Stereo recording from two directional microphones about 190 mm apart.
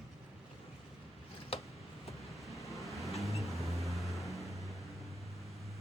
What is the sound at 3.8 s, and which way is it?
Vehicle, centre (ahead or behind).